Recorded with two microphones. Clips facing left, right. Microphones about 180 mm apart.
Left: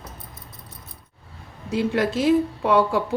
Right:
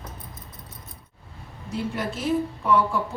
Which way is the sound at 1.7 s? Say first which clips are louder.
Left 7 dB; 85° left.